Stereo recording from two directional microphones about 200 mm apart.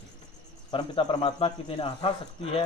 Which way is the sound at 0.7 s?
25° left (ahead or behind).